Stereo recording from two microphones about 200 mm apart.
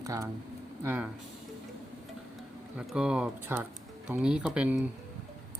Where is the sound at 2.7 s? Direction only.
5° right (ahead or behind).